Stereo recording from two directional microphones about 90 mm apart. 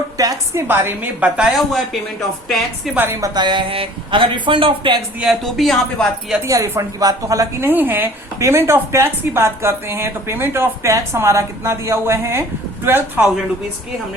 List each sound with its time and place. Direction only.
0.2 s a woman's voice: 40° right (ahead or behind)
0.5 s speech: 25° right (ahead or behind)
1.4 s speech: centre (ahead or behind)
2.9 s speech: 20° right (ahead or behind)
3.3 s speech: 60° right (ahead or behind)
5.3 s speech: centre (ahead or behind)
6.4 s a woman's voice: 35° right (ahead or behind)
7.6 s speech: 20° right (ahead or behind)